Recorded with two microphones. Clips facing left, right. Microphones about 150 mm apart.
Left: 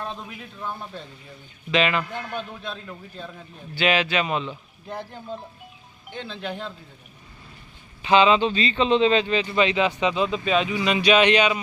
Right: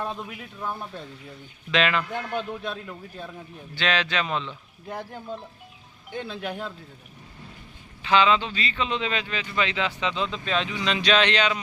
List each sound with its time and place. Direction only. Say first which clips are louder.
0.0 s a man's voice: right 2 dB; 10° right (ahead or behind)
2.3 s a man's voice: right 3 dB; 10° right (ahead or behind)
3.8 s speech: left 4 dB; 10° left (ahead or behind)
6.1 s a man's voice: right 1 dB; 10° right (ahead or behind)
8.0 s speech: left 4 dB; 20° left (ahead or behind)